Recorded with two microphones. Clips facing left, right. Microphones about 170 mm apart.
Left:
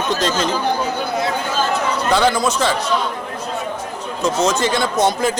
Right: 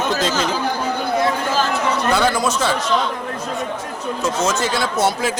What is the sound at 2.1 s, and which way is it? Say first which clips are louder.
Speech: left 4 dB; 10° right (ahead or behind).